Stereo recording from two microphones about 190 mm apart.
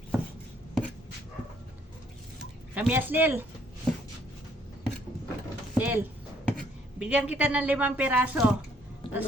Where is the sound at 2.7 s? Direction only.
10° right (ahead or behind).